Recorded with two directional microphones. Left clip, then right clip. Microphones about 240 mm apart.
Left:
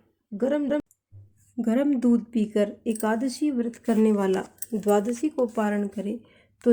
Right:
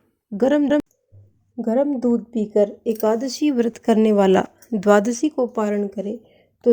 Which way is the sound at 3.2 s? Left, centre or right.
Right.